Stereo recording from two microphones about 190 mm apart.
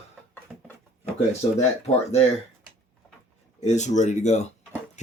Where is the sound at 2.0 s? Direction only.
35° left (ahead or behind).